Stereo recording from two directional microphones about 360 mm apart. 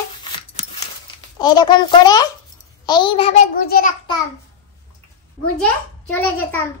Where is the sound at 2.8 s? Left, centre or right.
Centre.